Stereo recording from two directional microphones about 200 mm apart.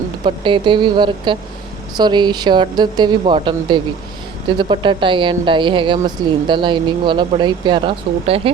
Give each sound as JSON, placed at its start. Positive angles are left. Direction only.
{"t": 0.3, "sound": "speech", "side_deg": -25}